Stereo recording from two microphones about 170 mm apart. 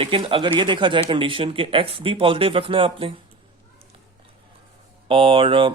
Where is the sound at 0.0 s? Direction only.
30° right (ahead or behind).